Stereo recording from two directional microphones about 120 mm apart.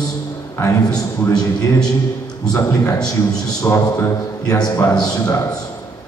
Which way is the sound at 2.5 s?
30° left (ahead or behind).